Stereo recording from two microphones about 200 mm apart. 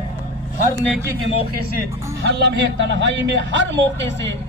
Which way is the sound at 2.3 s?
60° right (ahead or behind).